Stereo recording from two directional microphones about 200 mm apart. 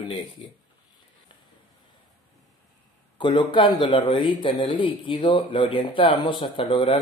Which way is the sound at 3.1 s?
25° left (ahead or behind).